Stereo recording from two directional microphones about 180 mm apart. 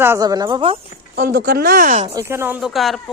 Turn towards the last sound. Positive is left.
turn(degrees=0)  # may be behind; listen again after turning